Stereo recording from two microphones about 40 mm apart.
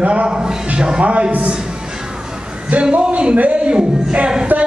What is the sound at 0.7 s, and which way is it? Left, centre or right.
Speech, right.